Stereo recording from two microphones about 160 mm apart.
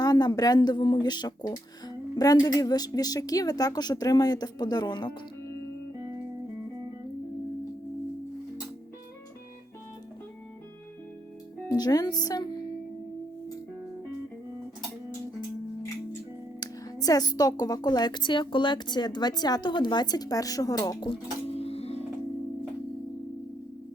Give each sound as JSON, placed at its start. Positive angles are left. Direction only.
{"t": 0.0, "sound": "speech", "side_deg": 25}
{"t": 11.7, "sound": "speech", "side_deg": 25}
{"t": 16.6, "sound": "speech", "side_deg": 25}
{"t": 21.5, "sound": "music", "side_deg": 40}